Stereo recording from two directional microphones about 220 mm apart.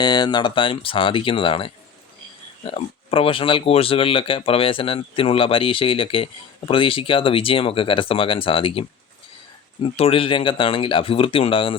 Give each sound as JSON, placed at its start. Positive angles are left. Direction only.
{"t": 0.0, "sound": "speech", "side_deg": 20}
{"t": 9.8, "sound": "speech", "side_deg": 25}